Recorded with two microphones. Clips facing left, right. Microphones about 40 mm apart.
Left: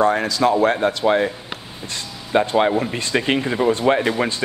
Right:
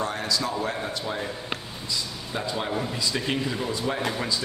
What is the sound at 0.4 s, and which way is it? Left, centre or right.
A man's voice, left.